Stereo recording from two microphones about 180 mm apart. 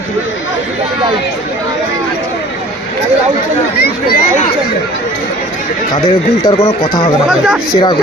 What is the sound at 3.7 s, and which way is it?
Speech, 60° left (ahead or behind).